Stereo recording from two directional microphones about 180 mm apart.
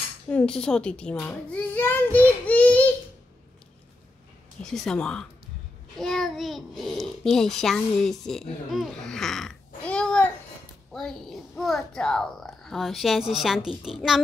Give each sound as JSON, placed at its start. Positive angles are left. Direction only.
{"t": 0.3, "sound": "a child's voice", "side_deg": 5}
{"t": 4.6, "sound": "speech", "side_deg": 5}
{"t": 9.8, "sound": "babbling", "side_deg": 5}
{"t": 10.9, "sound": "speech", "side_deg": 0}